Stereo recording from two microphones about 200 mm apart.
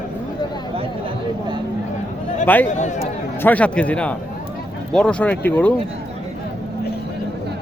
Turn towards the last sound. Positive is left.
turn(degrees=10)  # may be behind; listen again after turning